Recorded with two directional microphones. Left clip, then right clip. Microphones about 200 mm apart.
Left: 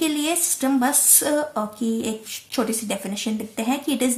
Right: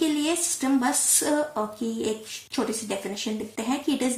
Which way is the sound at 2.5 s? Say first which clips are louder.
Left 3 dB; 50° left (ahead or behind).